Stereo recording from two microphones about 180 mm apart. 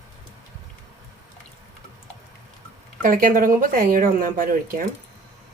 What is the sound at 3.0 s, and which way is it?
Speech, 50° right (ahead or behind).